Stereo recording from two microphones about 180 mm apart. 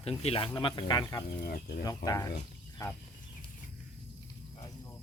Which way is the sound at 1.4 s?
60° left (ahead or behind).